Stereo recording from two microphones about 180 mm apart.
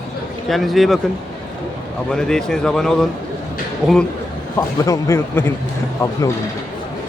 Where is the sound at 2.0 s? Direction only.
5° left (ahead or behind).